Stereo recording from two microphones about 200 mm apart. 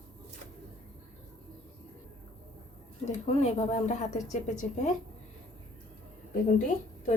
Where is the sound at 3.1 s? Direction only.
35° left (ahead or behind).